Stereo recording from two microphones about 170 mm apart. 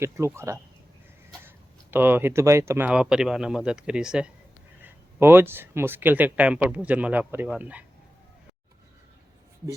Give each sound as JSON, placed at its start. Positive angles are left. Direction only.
{"t": 0.0, "sound": "speech", "side_deg": -15}